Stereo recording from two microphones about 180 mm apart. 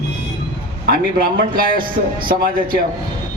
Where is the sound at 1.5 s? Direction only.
55° right (ahead or behind).